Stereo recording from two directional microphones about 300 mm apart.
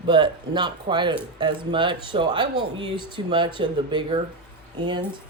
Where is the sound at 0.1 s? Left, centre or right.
Centre.